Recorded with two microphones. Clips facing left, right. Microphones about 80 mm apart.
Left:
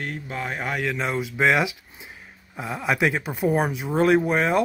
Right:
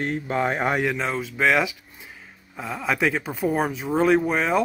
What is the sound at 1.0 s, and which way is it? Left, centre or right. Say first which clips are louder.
Speech: left 1 dB; centre.